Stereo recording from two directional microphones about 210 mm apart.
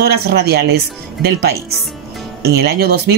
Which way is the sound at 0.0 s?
50° right (ahead or behind).